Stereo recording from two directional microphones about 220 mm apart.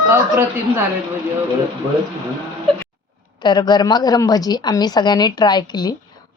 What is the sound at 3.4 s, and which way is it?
A woman's voice, 20° left (ahead or behind).